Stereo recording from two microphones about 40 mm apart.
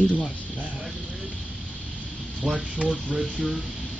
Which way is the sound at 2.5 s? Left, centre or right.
Right.